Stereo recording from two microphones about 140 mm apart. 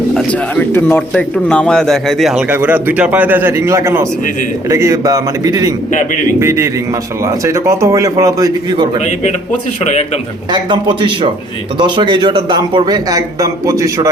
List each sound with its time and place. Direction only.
0.1 s bird: centre (ahead or behind)
0.5 s a man's voice: 10° left (ahead or behind); by 5.7 s 25° right (ahead or behind)
5.9 s speech: 65° left (ahead or behind)
6.4 s a man's voice: 20° right (ahead or behind)
10.5 s a man's voice: 35° right (ahead or behind)